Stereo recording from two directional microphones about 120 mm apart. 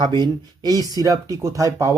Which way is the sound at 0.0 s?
35° right (ahead or behind).